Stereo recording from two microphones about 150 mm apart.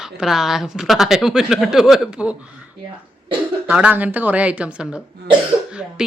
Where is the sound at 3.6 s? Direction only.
10° right (ahead or behind).